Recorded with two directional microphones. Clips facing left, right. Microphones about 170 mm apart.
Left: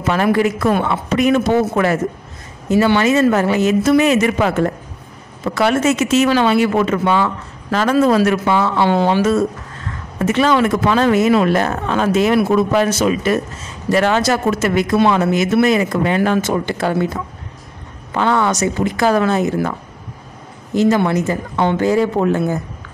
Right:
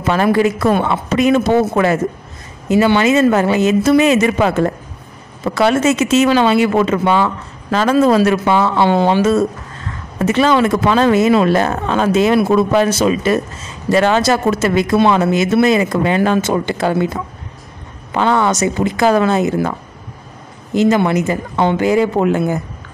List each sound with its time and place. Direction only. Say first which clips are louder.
0.0 s speech: right 2 dB; 30° right (ahead or behind)
20.8 s speech: right 1 dB; 20° right (ahead or behind)